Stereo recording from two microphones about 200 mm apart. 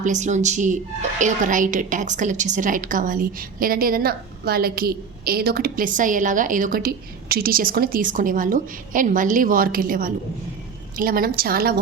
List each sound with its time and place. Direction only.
0.0 s a woman's voice: 35° right (ahead or behind)